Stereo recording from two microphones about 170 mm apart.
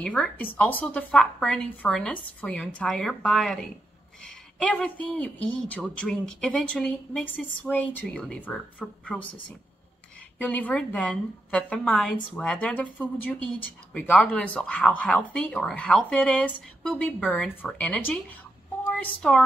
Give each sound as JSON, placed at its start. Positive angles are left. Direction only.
{"t": 0.0, "sound": "a woman's voice", "side_deg": 5}
{"t": 10.4, "sound": "a woman's voice", "side_deg": 10}